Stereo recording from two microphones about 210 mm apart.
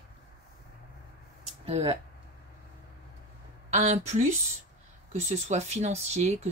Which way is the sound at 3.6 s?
35° right (ahead or behind).